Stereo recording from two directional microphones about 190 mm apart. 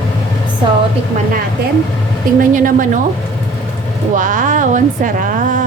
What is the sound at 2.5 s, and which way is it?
Speech, 45° right (ahead or behind).